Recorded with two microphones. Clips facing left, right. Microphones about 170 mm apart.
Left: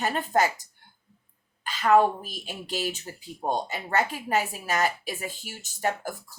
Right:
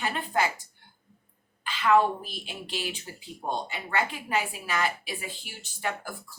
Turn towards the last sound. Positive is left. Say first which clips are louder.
# left 5 dB
turn(degrees=45)  # may be behind; listen again after turning